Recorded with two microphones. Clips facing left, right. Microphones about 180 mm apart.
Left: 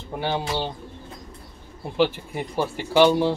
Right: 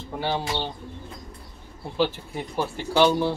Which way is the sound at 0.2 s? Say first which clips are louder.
Left 1 dB; 15° left (ahead or behind).